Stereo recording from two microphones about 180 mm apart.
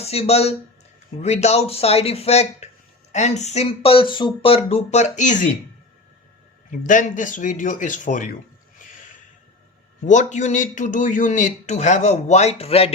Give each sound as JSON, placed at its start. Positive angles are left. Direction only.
{"t": 0.0, "sound": "a man's voice", "side_deg": 35}
{"t": 6.7, "sound": "speech", "side_deg": 45}
{"t": 10.0, "sound": "a man's voice", "side_deg": 45}